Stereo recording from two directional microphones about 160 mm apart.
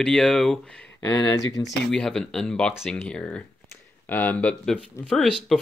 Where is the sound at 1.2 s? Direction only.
25° left (ahead or behind).